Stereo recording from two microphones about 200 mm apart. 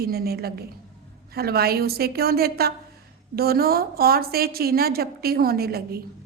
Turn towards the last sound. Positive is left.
turn(degrees=-50)  # may be behind; listen again after turning